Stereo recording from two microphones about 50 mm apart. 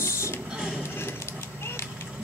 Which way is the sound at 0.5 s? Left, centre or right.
Centre.